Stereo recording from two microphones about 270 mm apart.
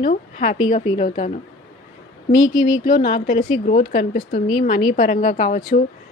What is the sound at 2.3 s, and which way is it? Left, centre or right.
Speech, centre.